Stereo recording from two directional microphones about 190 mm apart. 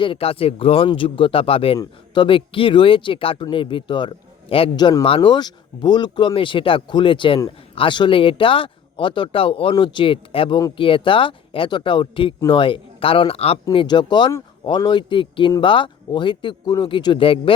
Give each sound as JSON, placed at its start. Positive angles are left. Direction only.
{"t": 0.0, "sound": "speech", "side_deg": 30}